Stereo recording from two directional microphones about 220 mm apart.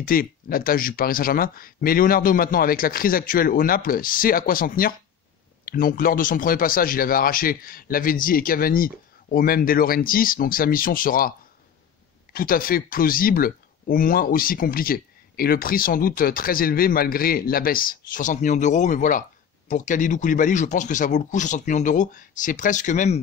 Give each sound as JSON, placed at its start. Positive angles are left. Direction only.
{"t": 0.0, "sound": "speech", "side_deg": 40}